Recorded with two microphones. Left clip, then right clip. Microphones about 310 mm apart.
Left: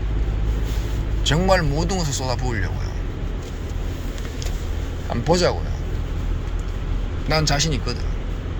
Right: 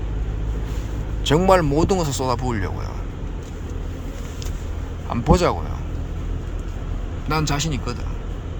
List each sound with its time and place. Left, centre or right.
1.2 s speech: centre
5.0 s speech: centre
7.3 s speech: centre